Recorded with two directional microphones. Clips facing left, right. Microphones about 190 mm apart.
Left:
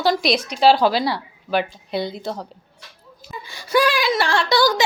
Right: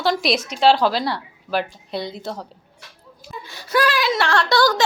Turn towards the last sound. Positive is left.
turn(degrees=0)  # may be behind; listen again after turning